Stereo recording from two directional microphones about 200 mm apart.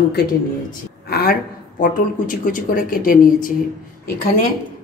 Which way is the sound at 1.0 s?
50° left (ahead or behind).